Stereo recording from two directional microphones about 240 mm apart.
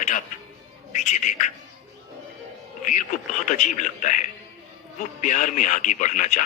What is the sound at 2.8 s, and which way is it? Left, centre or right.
Speech, left.